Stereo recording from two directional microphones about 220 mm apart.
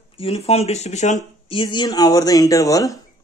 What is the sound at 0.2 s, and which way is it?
Speech, 25° left (ahead or behind).